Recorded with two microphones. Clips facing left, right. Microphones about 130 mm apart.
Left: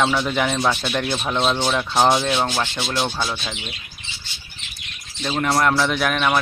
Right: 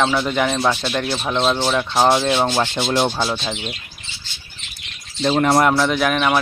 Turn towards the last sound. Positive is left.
turn(degrees=-5)  # may be behind; listen again after turning